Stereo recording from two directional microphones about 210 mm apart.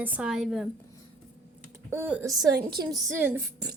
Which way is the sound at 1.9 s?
10° right (ahead or behind).